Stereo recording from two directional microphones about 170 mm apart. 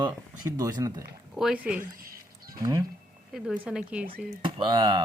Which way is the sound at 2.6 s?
20° right (ahead or behind).